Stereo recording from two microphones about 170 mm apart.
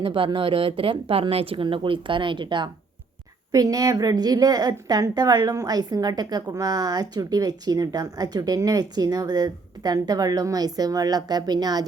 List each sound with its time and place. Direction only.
0.0 s a woman's voice: 30° right (ahead or behind)